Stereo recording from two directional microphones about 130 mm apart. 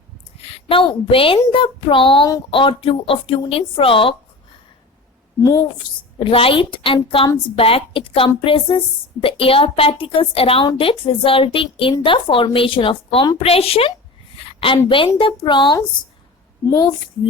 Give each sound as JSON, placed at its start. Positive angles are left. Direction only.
{"t": 0.3, "sound": "a woman's voice", "side_deg": 50}
{"t": 5.4, "sound": "a woman's voice", "side_deg": 30}
{"t": 6.1, "sound": "a woman's voice", "side_deg": 45}